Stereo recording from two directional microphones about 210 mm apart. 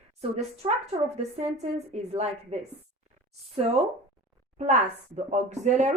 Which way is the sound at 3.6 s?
30° right (ahead or behind).